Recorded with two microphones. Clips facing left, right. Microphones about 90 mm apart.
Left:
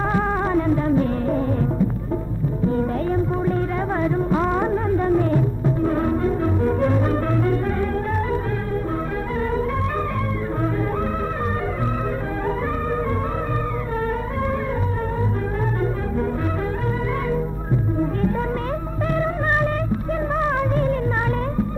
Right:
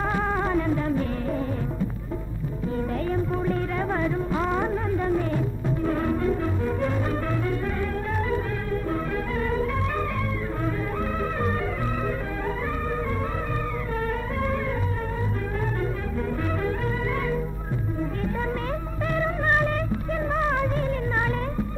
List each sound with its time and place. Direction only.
0.1 s music: 35° left (ahead or behind)
2.7 s music: 35° left (ahead or behind)
20.4 s music: 40° left (ahead or behind)